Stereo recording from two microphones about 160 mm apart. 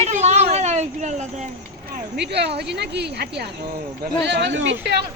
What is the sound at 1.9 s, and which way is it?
Speech, 90° right.